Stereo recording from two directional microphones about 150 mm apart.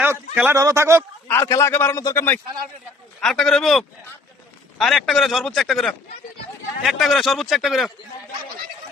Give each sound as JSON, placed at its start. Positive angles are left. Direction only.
{"t": 0.0, "sound": "a man's voice", "side_deg": -10}
{"t": 1.3, "sound": "a man's voice", "side_deg": 20}
{"t": 3.2, "sound": "a man's voice", "side_deg": 5}